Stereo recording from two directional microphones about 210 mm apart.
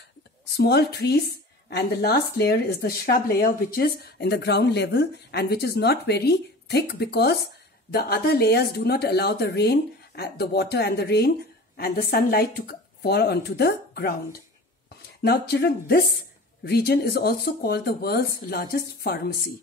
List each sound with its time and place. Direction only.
0.6 s a woman's voice: 50° left (ahead or behind)